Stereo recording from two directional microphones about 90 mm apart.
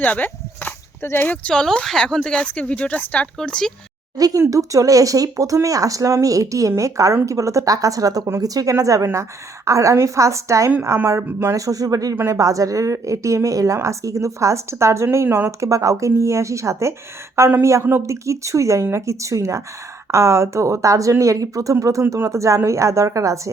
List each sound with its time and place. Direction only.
0.0 s a sound: 20° left (ahead or behind)
1.2 s speech: 15° left (ahead or behind)
4.2 s a woman's voice: 40° right (ahead or behind)
11.5 s a woman's voice: 40° right (ahead or behind)
12.1 s a woman's voice: 30° right (ahead or behind)